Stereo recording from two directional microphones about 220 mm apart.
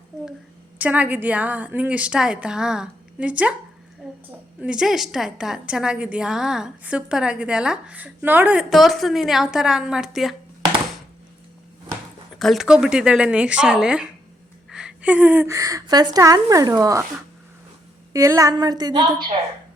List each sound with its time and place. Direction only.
0.8 s a woman's voice: 5° right (ahead or behind)
12.4 s a woman's voice: centre (ahead or behind)
18.1 s a woman's voice: 15° right (ahead or behind)